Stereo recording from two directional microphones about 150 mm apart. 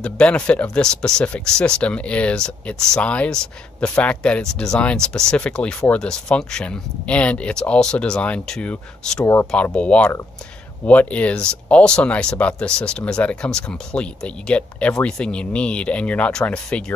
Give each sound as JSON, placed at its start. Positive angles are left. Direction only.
{"t": 0.0, "sound": "speech", "side_deg": 5}
{"t": 9.2, "sound": "speech", "side_deg": 15}